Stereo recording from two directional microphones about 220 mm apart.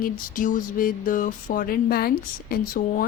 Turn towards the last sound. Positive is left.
turn(degrees=40)  # may be behind; listen again after turning